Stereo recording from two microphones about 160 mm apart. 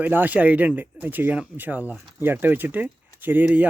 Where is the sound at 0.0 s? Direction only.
10° right (ahead or behind).